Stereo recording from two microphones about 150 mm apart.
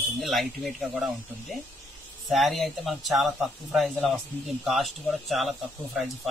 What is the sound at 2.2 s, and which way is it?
Speech, centre (ahead or behind).